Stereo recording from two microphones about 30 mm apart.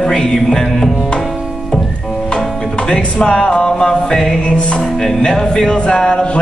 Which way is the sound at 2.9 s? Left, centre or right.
Left.